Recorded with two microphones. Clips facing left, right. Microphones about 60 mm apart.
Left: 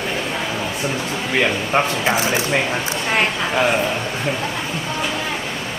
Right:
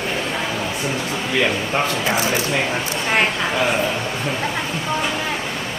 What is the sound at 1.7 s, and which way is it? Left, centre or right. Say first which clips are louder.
Speech: left 2 dB; left.